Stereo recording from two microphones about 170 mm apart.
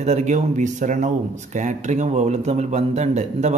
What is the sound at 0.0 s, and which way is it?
Speech, 45° right (ahead or behind).